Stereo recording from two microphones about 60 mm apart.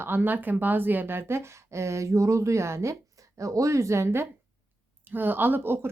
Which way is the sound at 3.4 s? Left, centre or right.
Right.